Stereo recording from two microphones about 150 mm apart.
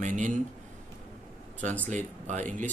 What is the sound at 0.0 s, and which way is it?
Speech, 60° right (ahead or behind).